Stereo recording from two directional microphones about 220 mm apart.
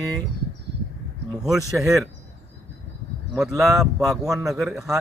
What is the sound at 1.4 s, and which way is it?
Speech, centre (ahead or behind).